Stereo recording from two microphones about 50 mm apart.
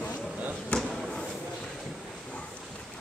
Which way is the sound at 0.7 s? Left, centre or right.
Left.